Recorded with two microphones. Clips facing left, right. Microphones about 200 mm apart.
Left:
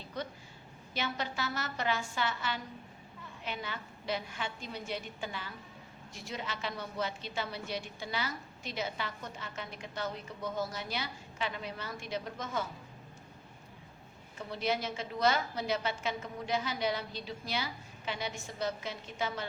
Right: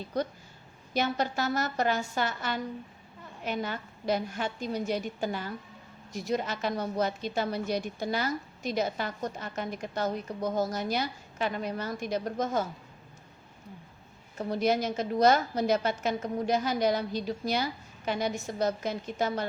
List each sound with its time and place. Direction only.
0.1 s a woman's voice: 40° right (ahead or behind)
14.3 s a woman's voice: 40° right (ahead or behind)